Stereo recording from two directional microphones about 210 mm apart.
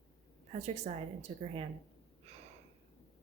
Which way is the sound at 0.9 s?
35° right (ahead or behind).